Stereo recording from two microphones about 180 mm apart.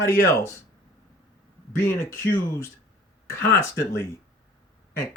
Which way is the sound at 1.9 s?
15° left (ahead or behind).